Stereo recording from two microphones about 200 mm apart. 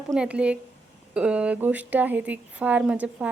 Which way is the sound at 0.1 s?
5° right (ahead or behind).